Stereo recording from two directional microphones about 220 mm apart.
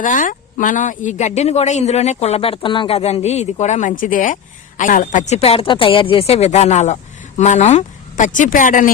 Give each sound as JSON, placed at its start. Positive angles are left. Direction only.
{"t": 0.0, "sound": "speech", "side_deg": 35}